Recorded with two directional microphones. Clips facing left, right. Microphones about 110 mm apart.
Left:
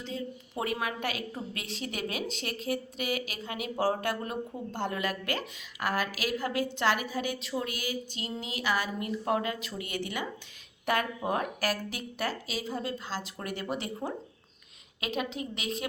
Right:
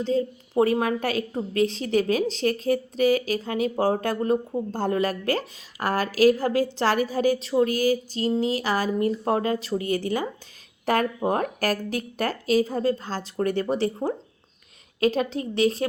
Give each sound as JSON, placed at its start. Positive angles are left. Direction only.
{"t": 0.0, "sound": "speech", "side_deg": -35}